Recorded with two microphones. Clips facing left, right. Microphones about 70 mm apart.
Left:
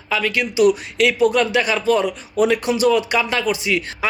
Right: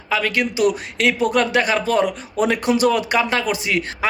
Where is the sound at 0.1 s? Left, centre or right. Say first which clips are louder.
Right 1 dB; right.